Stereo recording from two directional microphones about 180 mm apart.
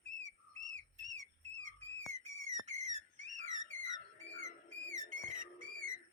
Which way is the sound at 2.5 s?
40° right (ahead or behind).